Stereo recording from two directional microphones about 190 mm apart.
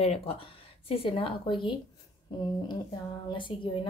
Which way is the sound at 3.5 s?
30° left (ahead or behind).